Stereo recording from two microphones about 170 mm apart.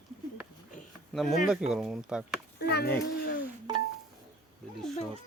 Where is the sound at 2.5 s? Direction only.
70° left (ahead or behind).